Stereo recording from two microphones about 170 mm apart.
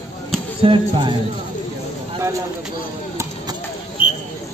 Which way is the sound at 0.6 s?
30° right (ahead or behind).